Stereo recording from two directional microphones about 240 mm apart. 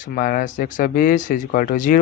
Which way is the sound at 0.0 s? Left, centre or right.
Left.